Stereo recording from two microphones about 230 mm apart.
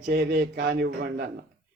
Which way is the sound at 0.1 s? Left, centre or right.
Right.